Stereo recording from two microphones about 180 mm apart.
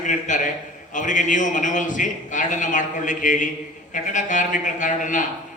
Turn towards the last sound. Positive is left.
turn(degrees=45)  # may be behind; listen again after turning